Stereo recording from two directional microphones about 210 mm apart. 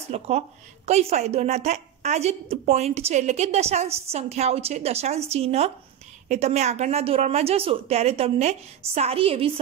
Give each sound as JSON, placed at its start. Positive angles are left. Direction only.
{"t": 0.1, "sound": "a woman's voice", "side_deg": -30}